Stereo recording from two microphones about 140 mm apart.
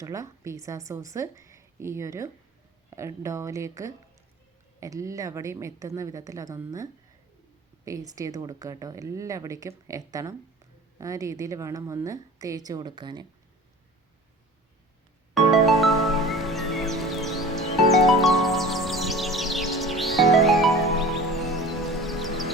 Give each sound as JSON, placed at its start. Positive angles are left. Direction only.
{"t": 0.0, "sound": "speech", "side_deg": -25}
{"t": 7.9, "sound": "speech", "side_deg": -25}
{"t": 15.4, "sound": "music", "side_deg": 0}